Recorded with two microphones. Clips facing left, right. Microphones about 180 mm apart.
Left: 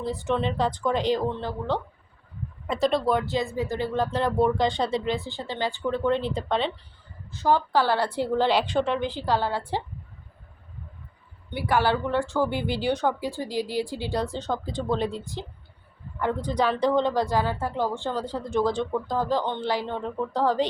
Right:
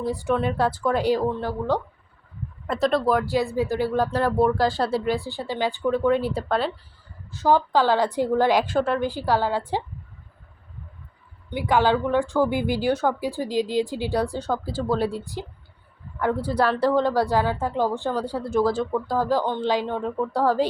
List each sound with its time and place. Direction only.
0.0 s speech: 10° right (ahead or behind)
2.6 s speech: centre (ahead or behind)
5.1 s speech: 20° left (ahead or behind)
5.4 s speech: 15° right (ahead or behind)
11.7 s speech: 15° right (ahead or behind)
16.2 s speech: 10° right (ahead or behind)